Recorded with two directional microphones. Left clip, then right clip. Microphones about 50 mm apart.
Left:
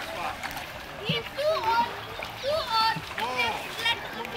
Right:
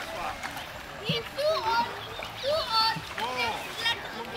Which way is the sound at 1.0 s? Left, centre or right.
Centre.